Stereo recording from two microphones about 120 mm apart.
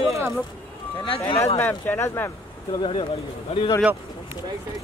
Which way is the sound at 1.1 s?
45° left (ahead or behind).